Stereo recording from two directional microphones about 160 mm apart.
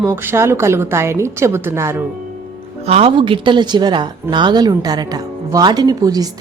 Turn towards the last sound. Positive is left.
turn(degrees=-25)  # may be behind; listen again after turning